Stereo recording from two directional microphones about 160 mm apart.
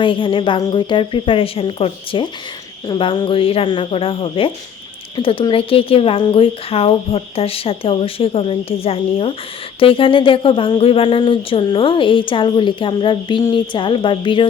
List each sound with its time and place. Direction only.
0.0 s speech: 30° left (ahead or behind)